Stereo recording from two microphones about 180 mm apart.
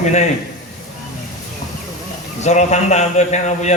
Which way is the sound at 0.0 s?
40° left (ahead or behind).